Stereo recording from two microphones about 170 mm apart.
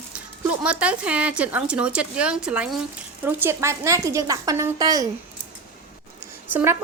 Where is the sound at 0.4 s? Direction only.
5° right (ahead or behind).